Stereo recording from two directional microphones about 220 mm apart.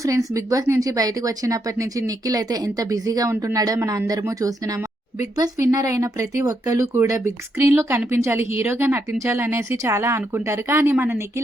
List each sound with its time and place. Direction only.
0.0 s speech: 15° right (ahead or behind)